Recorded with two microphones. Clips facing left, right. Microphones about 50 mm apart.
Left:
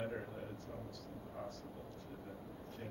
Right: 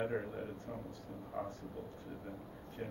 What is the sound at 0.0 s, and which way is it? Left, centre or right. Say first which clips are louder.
Speech: right 5 dB; right.